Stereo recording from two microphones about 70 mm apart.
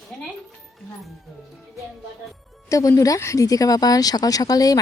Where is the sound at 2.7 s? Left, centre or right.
Left.